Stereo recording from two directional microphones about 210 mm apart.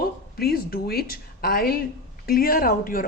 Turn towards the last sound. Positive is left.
turn(degrees=40)  # may be behind; listen again after turning